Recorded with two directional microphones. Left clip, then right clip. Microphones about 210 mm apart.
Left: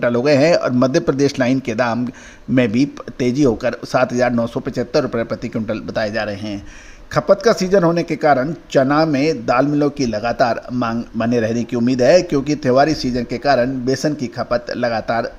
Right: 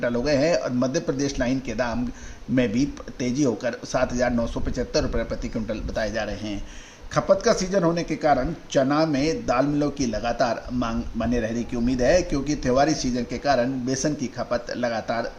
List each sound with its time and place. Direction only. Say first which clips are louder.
0.0 s a man's voice: left 8 dB; 40° left (ahead or behind)